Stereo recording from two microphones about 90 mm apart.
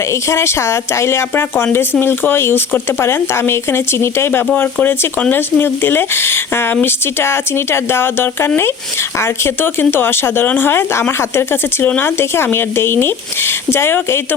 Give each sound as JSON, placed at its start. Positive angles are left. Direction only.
{"t": 0.1, "sound": "speech", "side_deg": 30}